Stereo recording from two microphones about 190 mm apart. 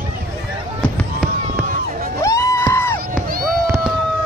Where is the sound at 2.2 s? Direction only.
15° left (ahead or behind).